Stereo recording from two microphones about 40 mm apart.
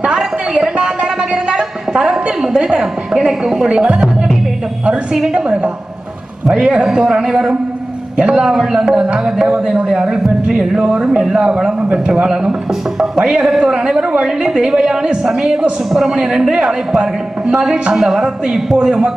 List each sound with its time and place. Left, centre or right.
0.0 s a sound: centre
1.3 s a woman's voice: centre
5.3 s a woman's voice: right; by 10.8 s centre
10.8 s a woman's voice: right; by 18.8 s centre
18.8 s speech: right